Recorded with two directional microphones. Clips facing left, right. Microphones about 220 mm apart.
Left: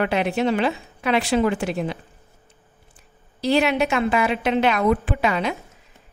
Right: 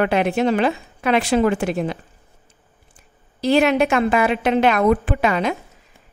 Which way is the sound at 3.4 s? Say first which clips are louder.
Right 3 dB; 50° right (ahead or behind).